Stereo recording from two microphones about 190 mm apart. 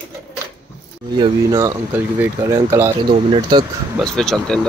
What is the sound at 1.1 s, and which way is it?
Speech, 15° right (ahead or behind).